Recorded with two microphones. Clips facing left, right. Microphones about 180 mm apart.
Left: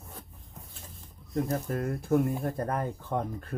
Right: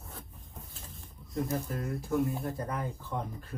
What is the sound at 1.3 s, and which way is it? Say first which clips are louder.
Speech: left 3 dB; 55° left (ahead or behind).